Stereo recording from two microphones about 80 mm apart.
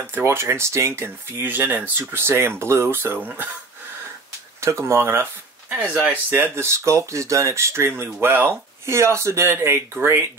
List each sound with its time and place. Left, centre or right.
0.0 s speech: right
4.6 s speech: right